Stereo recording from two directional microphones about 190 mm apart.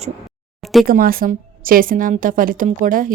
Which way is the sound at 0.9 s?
50° right (ahead or behind).